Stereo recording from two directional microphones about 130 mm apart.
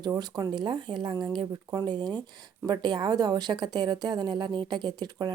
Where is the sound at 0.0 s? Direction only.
30° right (ahead or behind).